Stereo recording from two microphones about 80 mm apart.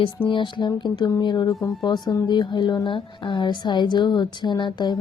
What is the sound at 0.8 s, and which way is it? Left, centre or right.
A woman's voice, left.